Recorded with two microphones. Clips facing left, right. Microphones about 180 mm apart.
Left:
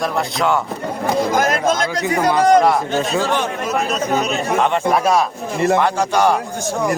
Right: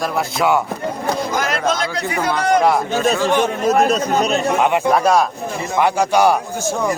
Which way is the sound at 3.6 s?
40° right (ahead or behind).